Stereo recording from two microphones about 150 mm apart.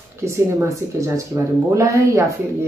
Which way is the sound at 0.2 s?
20° right (ahead or behind).